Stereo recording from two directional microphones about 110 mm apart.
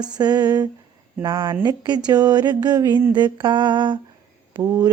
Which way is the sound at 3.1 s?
45° right (ahead or behind).